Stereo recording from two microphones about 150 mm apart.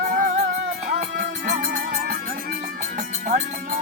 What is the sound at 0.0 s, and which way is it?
Music, 65° right (ahead or behind).